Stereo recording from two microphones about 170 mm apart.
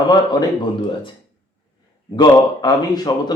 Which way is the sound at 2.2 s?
25° left (ahead or behind).